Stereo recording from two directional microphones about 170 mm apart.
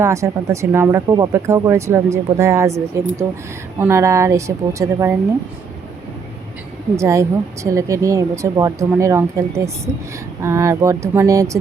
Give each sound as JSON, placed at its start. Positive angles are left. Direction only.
{"t": 0.0, "sound": "speech", "side_deg": -15}
{"t": 6.9, "sound": "speech", "side_deg": -15}